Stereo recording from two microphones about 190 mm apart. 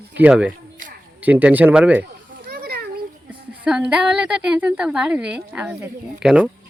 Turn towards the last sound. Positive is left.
turn(degrees=-5)  # may be behind; listen again after turning